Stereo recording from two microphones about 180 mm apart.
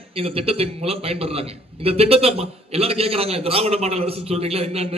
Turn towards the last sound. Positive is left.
turn(degrees=-35)  # may be behind; listen again after turning